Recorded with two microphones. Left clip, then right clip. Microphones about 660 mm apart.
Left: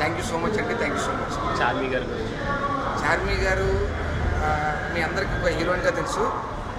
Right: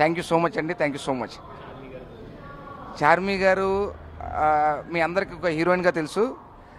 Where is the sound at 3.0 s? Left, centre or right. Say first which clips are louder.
Right 7 dB; right.